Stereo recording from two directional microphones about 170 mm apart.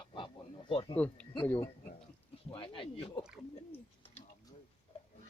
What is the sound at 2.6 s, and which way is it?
Speech, 30° left (ahead or behind).